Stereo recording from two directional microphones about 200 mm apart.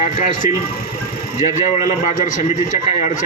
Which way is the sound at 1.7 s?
40° left (ahead or behind).